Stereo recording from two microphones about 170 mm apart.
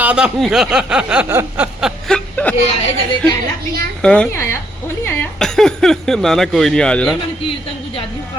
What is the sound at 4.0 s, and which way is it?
Speech, 5° left (ahead or behind).